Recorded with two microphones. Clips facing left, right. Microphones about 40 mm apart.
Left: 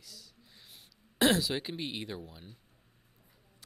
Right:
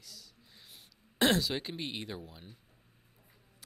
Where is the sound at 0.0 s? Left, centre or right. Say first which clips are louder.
Even; centre.